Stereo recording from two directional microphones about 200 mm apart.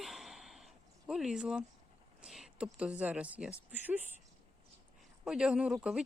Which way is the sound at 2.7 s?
5° right (ahead or behind).